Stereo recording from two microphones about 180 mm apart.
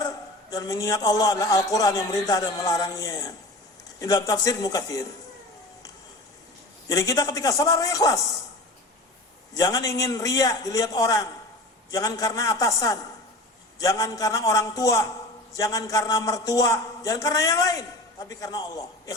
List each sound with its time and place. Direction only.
0.5 s a man's voice: 20° left (ahead or behind)
6.8 s a man's voice: 20° left (ahead or behind)
9.6 s a man's voice: 20° left (ahead or behind)